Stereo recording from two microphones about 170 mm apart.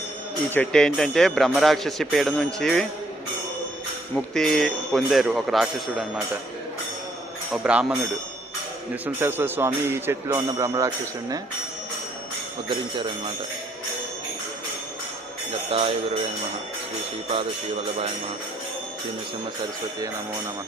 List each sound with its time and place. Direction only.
0.5 s speech: 5° left (ahead or behind)
4.1 s speech: centre (ahead or behind)
7.5 s speech: 5° right (ahead or behind)
9.0 s speech: 10° right (ahead or behind)
15.7 s jingle bell: 35° right (ahead or behind)